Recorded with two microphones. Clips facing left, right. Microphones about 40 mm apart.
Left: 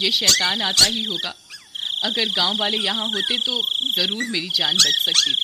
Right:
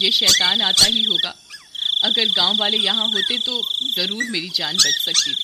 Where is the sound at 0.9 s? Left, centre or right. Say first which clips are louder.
Right 6 dB; centre.